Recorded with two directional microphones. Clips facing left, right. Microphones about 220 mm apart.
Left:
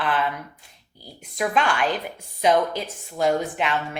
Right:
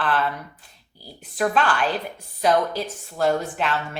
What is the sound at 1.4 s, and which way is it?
A woman's voice, 10° left (ahead or behind).